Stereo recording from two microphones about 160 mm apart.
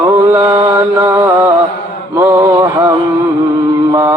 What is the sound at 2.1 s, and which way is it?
Mantra, 20° right (ahead or behind).